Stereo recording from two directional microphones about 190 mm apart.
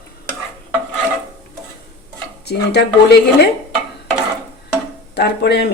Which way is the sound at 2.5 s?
60° left (ahead or behind).